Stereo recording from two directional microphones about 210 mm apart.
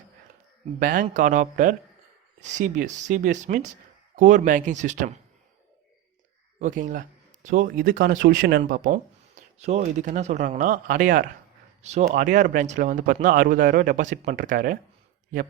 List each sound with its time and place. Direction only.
0.8 s speech: 40° right (ahead or behind)
6.6 s speech: 35° right (ahead or behind)